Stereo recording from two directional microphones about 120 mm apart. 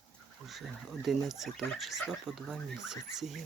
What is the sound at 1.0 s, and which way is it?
Speech, centre (ahead or behind).